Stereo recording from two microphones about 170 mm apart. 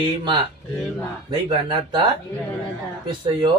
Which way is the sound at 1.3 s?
25° right (ahead or behind).